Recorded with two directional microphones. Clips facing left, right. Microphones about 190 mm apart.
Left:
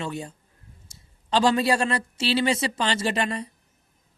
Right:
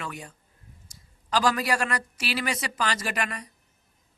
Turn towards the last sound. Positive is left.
turn(degrees=25)  # may be behind; listen again after turning